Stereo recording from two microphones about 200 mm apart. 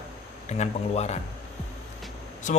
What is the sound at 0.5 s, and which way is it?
Speech, 35° left (ahead or behind).